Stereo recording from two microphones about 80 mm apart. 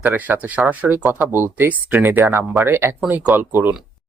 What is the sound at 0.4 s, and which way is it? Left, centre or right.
Speech, right.